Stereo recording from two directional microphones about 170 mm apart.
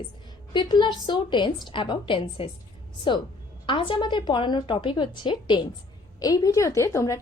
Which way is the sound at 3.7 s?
30° left (ahead or behind).